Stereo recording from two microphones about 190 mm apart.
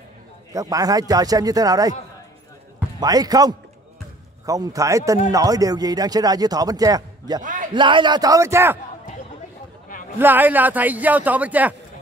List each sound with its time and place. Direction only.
0.5 s a man's voice: 20° right (ahead or behind)
3.0 s a man's voice: 20° right (ahead or behind)
7.4 s a sound: 45° right (ahead or behind)
7.7 s a man's voice: 25° right (ahead or behind)
10.1 s a man's voice: 10° right (ahead or behind)